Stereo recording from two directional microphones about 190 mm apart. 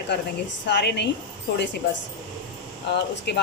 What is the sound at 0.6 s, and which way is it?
Speech, 65° left (ahead or behind).